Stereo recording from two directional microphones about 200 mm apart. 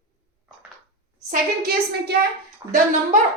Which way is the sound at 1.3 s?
50° right (ahead or behind).